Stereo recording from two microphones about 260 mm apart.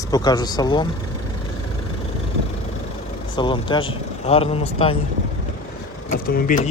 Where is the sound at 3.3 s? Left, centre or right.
Centre.